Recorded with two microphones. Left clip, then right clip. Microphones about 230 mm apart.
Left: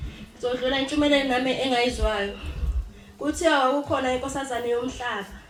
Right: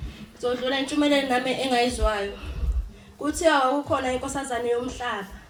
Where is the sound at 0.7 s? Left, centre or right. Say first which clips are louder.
Left 1 dB; right.